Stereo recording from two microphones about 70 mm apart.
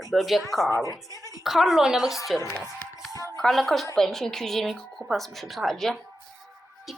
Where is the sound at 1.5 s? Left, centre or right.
Centre.